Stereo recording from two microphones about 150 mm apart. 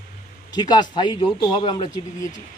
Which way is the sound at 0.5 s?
30° left (ahead or behind).